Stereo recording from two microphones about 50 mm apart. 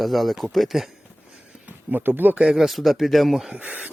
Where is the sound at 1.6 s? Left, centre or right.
Right.